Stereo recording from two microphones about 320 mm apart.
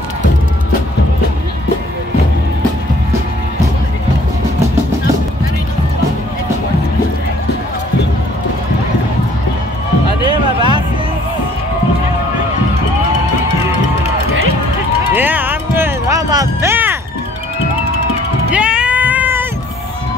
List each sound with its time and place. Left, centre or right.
10.2 s music: centre
15.1 s music: centre
18.5 s sheep: centre